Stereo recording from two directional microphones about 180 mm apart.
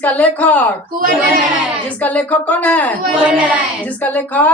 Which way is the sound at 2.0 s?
10° left (ahead or behind).